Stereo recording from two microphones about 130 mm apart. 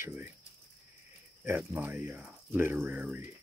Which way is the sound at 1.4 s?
15° right (ahead or behind).